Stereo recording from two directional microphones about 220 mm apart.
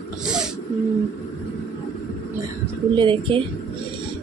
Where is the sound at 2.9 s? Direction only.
20° right (ahead or behind).